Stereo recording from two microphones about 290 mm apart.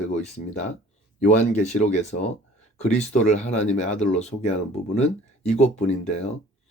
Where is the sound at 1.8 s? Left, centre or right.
Left.